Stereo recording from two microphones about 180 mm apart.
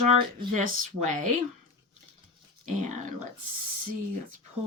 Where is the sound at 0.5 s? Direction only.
45° right (ahead or behind).